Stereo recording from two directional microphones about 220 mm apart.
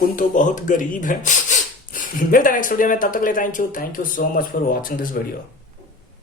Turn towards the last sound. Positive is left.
turn(degrees=40)  # may be behind; listen again after turning